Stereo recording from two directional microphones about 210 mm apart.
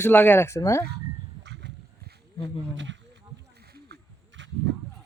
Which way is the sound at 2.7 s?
60° right (ahead or behind).